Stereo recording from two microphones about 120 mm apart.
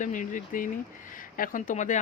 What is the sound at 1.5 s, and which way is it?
Speech, 90° left.